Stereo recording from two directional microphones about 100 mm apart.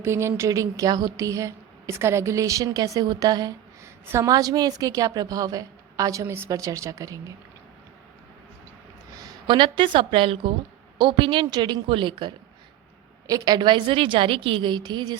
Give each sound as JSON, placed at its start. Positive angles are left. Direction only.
{"t": 0.0, "sound": "speech", "side_deg": -25}
{"t": 6.5, "sound": "speech", "side_deg": -35}
{"t": 9.5, "sound": "a woman's voice", "side_deg": -55}
{"t": 10.9, "sound": "a woman's voice", "side_deg": -50}
{"t": 13.2, "sound": "a woman's voice", "side_deg": -40}